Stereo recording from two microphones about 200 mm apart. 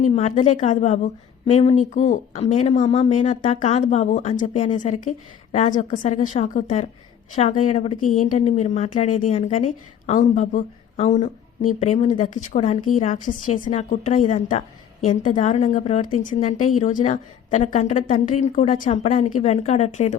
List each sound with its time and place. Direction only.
0.0 s a woman's voice: 30° left (ahead or behind)